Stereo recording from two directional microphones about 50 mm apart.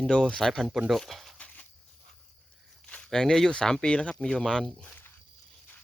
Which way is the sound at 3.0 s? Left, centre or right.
Centre.